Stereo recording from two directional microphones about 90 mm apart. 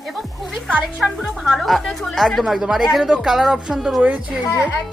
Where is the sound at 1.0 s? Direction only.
Centre (ahead or behind).